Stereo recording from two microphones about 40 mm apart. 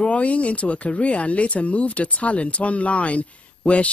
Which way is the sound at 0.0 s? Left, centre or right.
Left.